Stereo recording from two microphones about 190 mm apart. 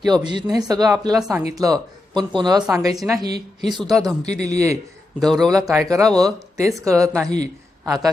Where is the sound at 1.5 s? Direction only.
20° right (ahead or behind).